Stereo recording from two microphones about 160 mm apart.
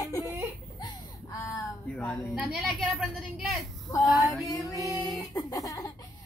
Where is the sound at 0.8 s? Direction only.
25° left (ahead or behind).